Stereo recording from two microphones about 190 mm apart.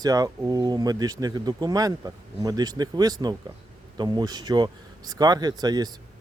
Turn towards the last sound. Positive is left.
turn(degrees=-20)  # may be behind; listen again after turning